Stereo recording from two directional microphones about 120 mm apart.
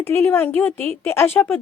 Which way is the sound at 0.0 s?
20° left (ahead or behind).